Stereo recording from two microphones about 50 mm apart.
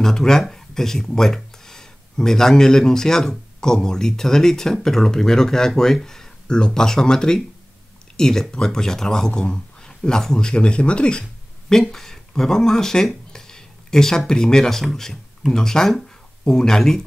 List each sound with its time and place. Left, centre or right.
0.0 s speech: centre
11.7 s speech: centre